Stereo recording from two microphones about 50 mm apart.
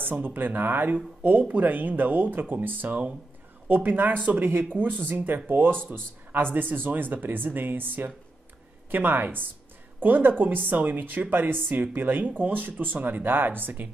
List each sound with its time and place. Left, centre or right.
0.0 s a woman's voice: right